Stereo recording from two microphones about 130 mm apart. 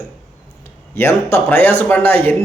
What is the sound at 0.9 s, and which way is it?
A man's voice, 15° left (ahead or behind).